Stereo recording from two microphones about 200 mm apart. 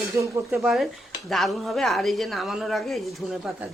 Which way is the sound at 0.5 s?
Centre (ahead or behind).